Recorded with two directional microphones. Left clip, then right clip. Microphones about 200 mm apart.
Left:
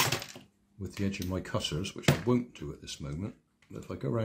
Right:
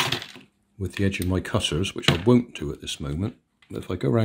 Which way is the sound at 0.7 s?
45° right (ahead or behind).